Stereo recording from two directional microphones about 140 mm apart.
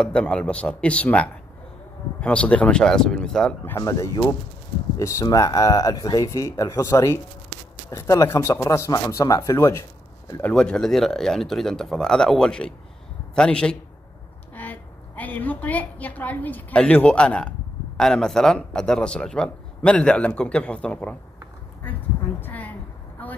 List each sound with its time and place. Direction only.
0.0 s speech: 5° left (ahead or behind)
3.6 s speech: 25° left (ahead or behind)
10.4 s a man's voice: 5° left (ahead or behind)
21.8 s a sound: 15° left (ahead or behind)